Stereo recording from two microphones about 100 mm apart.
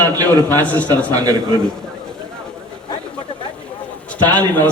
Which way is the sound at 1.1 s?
40° right (ahead or behind).